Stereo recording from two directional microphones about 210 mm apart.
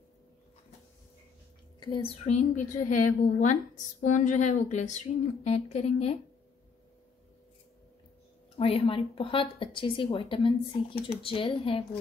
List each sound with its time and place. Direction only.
1.8 s a woman's voice: 25° left (ahead or behind)
8.5 s a woman's voice: 25° left (ahead or behind)